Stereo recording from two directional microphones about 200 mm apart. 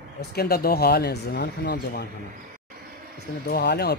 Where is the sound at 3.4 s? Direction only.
55° left (ahead or behind).